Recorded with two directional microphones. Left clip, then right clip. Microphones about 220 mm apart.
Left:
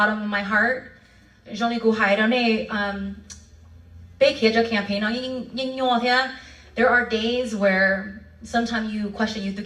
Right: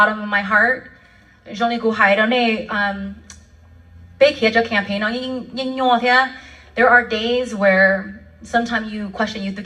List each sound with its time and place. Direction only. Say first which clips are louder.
0.0 s speech: right 6 dB; 10° right (ahead or behind)